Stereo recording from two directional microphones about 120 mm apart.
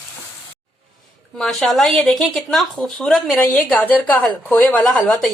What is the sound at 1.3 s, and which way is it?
A woman's voice, 5° left (ahead or behind).